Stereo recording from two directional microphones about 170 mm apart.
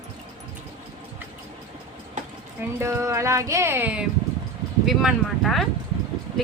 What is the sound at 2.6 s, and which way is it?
A woman's voice, 15° right (ahead or behind).